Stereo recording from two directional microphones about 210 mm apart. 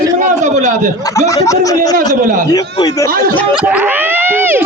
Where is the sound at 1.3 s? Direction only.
15° left (ahead or behind).